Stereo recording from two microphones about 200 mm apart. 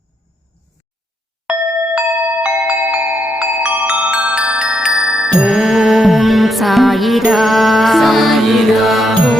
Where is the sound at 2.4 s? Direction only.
5° right (ahead or behind).